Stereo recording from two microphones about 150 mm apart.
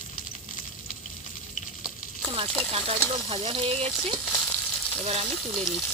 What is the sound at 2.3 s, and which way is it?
Frying, 40° right (ahead or behind).